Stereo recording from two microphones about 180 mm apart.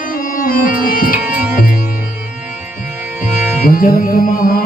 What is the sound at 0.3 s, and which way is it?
Music, 50° left (ahead or behind).